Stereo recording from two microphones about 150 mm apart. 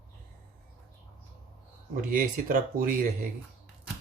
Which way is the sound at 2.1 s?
65° right (ahead or behind).